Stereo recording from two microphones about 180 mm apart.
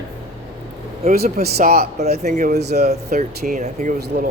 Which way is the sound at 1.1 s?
60° right (ahead or behind).